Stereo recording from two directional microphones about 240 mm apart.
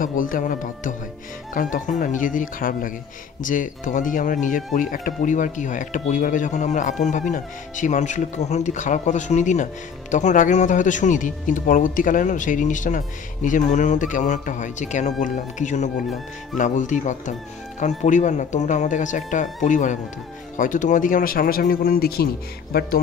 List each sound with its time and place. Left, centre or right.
0.0 s speech: left